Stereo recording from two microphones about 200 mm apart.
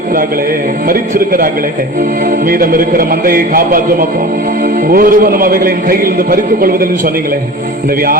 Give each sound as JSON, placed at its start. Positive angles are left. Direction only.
{"t": 0.9, "sound": "a man's voice", "side_deg": -45}
{"t": 2.5, "sound": "a man's voice", "side_deg": -45}
{"t": 4.9, "sound": "a man's voice", "side_deg": -45}